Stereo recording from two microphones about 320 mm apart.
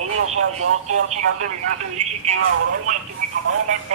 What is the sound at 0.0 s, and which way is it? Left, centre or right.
Speech, right.